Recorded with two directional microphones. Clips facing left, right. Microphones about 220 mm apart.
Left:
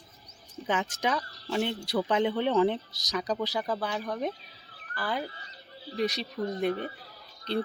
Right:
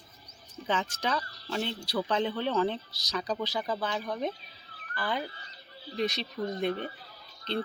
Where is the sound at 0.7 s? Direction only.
15° left (ahead or behind).